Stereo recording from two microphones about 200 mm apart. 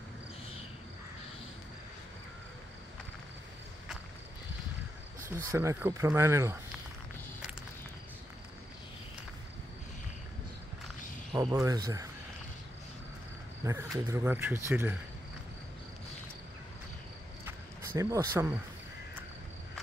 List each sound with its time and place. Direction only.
5.3 s speech: 15° right (ahead or behind)
11.3 s speech: 20° right (ahead or behind)
13.7 s speech: 15° right (ahead or behind)
17.9 s speech: 15° right (ahead or behind)